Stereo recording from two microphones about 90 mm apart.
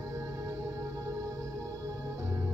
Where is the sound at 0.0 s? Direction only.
35° right (ahead or behind).